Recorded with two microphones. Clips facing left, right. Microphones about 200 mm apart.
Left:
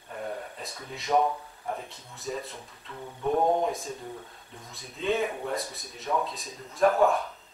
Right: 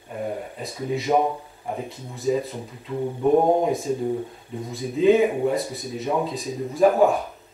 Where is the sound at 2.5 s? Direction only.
25° right (ahead or behind).